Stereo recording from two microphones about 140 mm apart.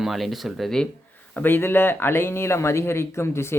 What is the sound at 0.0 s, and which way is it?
Speech, centre (ahead or behind).